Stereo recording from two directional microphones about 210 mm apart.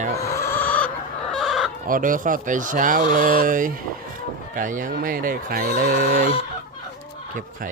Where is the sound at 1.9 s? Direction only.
40° right (ahead or behind).